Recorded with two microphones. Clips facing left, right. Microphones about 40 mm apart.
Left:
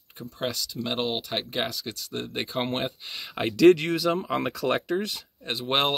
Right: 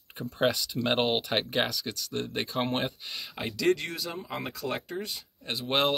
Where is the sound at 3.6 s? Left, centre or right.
Left.